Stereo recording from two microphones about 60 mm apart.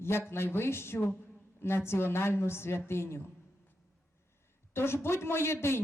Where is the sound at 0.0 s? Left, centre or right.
Left.